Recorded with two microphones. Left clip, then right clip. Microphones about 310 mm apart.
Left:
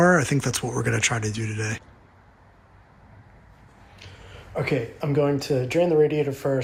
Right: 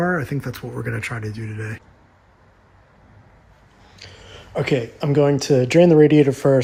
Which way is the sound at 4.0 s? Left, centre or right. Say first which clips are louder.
Right 5 dB; right.